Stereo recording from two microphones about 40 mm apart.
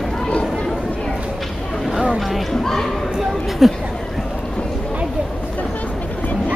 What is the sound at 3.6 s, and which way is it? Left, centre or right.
Speech, centre.